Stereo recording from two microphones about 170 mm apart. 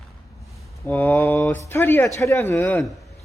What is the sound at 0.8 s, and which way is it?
Speech, 10° left (ahead or behind).